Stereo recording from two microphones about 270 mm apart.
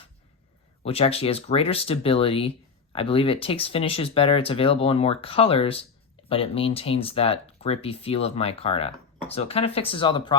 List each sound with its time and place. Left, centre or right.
0.9 s speech: left